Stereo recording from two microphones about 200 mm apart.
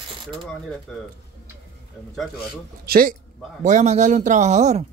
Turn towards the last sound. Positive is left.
turn(degrees=-35)  # may be behind; listen again after turning